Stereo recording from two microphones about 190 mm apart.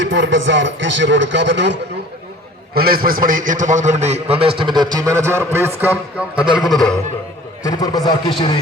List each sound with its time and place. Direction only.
0.0 s speech: 85° right; by 1.8 s 65° right (ahead or behind)
2.7 s a man's voice: 50° right (ahead or behind); by 6.9 s centre (ahead or behind)
7.6 s a man's voice: 20° left (ahead or behind)